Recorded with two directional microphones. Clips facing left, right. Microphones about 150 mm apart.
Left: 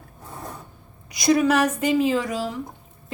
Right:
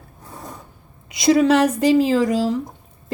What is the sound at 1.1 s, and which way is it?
A woman's voice, 25° right (ahead or behind).